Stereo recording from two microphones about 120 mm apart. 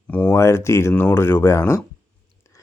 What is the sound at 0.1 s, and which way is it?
Speech, 15° left (ahead or behind).